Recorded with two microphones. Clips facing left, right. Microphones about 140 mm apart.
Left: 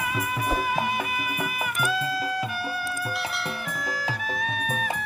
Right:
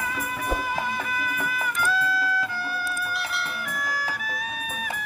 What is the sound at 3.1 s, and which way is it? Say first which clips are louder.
Music: even; centre (ahead or behind).